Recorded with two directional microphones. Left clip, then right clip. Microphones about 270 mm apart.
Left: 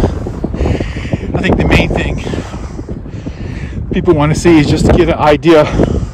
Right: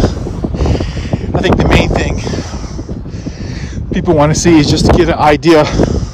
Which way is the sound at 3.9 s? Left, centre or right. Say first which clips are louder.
Right 1 dB; centre.